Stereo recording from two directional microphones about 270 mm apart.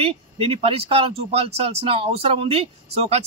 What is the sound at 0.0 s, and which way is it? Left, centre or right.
Speech, right.